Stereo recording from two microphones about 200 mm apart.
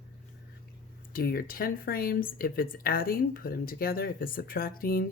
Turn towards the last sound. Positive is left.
turn(degrees=45)  # may be behind; listen again after turning